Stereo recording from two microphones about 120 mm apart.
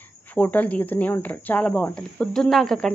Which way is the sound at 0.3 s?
15° left (ahead or behind).